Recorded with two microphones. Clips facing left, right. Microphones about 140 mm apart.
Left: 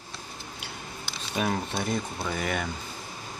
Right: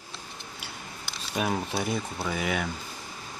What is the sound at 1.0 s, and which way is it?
Speech, 5° right (ahead or behind).